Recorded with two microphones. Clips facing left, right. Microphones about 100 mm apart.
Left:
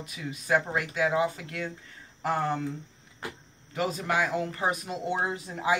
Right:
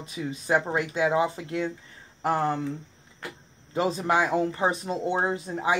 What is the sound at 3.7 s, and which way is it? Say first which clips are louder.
Speech: right 4 dB; 30° right (ahead or behind).